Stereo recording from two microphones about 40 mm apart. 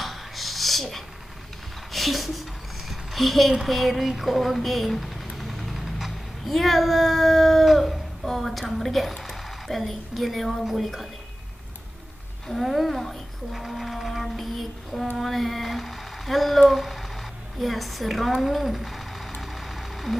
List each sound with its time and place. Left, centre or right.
0.0 s a sound: centre
4.1 s speech: centre
10.7 s child singing: centre
12.4 s speech: centre
13.6 s child singing: centre
15.1 s cat: centre